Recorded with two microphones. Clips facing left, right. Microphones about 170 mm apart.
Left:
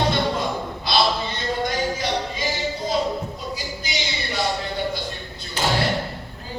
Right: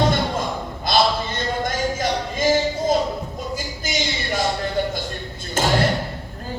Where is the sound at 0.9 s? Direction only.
50° right (ahead or behind).